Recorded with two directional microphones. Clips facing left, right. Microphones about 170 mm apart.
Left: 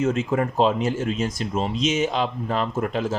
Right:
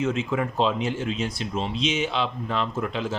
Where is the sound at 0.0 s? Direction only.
45° left (ahead or behind).